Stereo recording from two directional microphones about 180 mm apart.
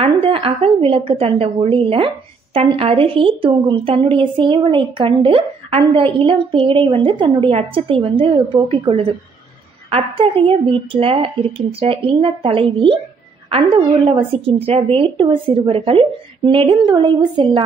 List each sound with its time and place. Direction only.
0.0 s a woman's voice: 30° right (ahead or behind)